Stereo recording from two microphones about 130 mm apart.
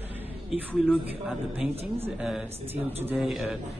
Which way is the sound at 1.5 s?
5° right (ahead or behind).